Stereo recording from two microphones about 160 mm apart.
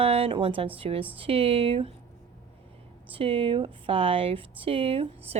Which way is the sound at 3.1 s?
35° right (ahead or behind).